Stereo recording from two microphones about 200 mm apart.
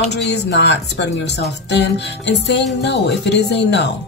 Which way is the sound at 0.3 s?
55° left (ahead or behind).